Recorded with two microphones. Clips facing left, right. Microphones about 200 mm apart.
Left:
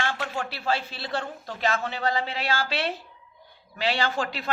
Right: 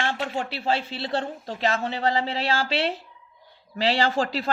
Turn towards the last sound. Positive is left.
turn(degrees=-35)  # may be behind; listen again after turning